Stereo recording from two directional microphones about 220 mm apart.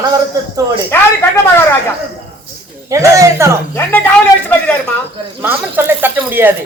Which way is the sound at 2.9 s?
15° right (ahead or behind).